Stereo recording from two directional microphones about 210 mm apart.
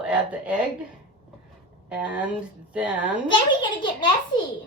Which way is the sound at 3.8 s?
20° left (ahead or behind).